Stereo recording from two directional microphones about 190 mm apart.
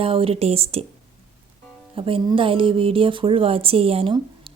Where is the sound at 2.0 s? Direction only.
30° right (ahead or behind).